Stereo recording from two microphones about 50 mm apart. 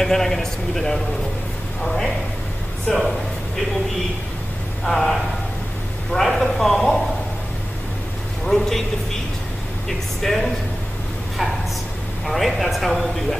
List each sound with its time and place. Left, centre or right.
0.0 s a man's voice: centre
2.9 s a man's voice: centre
4.8 s speech: centre
8.5 s a man's voice: centre
9.8 s speech: centre
12.3 s speech: centre